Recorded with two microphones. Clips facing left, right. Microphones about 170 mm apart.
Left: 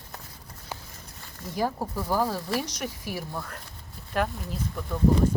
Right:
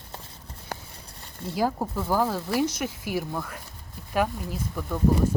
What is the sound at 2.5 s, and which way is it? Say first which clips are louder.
Speech: right 4 dB; 10° right (ahead or behind).